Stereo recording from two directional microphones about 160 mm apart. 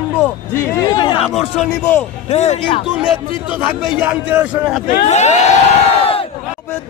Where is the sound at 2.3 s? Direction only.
45° left (ahead or behind).